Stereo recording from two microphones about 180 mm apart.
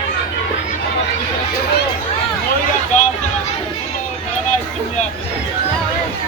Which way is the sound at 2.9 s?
40° left (ahead or behind).